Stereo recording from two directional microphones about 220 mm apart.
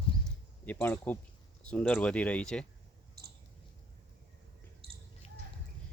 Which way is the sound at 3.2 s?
45° right (ahead or behind).